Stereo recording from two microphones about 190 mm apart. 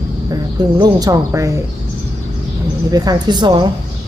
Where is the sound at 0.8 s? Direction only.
20° right (ahead or behind).